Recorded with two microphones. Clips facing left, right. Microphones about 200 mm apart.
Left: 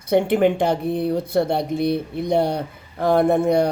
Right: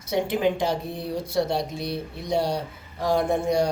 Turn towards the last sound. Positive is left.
turn(degrees=60)  # may be behind; listen again after turning